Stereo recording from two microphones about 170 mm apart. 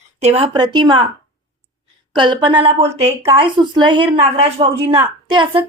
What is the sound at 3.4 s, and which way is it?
A woman's voice, 30° right (ahead or behind).